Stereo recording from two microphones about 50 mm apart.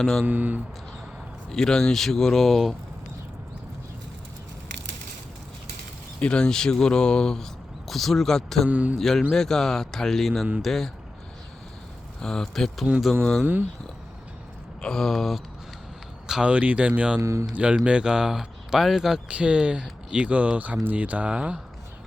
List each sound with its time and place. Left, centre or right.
0.0 s speech: centre
0.3 s speech: right
1.5 s speech: centre
6.1 s speech: left
8.7 s speech: right
9.0 s speech: centre
12.2 s speech: centre
13.4 s speech: right
14.8 s speech: centre
16.2 s speech: centre
16.5 s speech: right
17.2 s speech: right
17.5 s speech: right; by 19.2 s centre
19.3 s speech: right